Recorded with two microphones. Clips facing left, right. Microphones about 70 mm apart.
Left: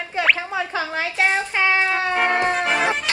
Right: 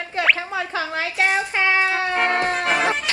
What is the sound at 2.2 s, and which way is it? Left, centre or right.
Music, centre.